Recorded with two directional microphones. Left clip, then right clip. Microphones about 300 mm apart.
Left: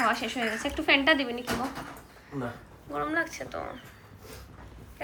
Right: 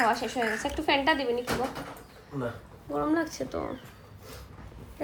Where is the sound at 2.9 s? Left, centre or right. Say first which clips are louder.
Right 1 dB; centre.